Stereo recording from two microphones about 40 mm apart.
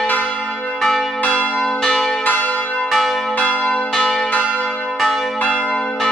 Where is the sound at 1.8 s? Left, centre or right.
Centre.